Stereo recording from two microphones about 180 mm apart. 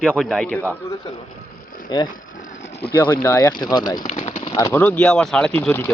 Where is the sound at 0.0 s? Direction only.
5° left (ahead or behind).